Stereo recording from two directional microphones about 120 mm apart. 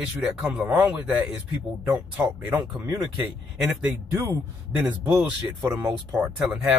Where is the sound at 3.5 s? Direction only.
5° right (ahead or behind).